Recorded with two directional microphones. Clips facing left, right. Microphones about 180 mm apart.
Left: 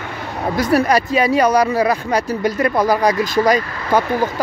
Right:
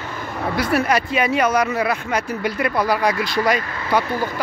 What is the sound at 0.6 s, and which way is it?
Speech, 40° left (ahead or behind).